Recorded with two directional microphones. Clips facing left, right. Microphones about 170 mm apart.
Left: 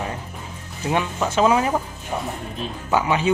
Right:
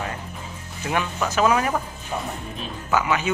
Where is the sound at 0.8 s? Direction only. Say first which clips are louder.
Left 2 dB; 25° left (ahead or behind).